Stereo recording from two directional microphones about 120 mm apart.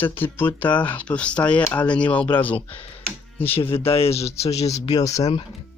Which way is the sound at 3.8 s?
50° left (ahead or behind).